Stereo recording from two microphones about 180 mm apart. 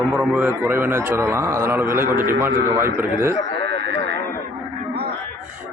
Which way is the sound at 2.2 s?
50° right (ahead or behind).